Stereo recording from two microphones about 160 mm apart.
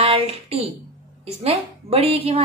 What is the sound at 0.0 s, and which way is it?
A woman's voice, 40° right (ahead or behind).